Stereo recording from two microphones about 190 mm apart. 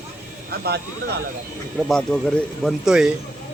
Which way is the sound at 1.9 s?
5° left (ahead or behind).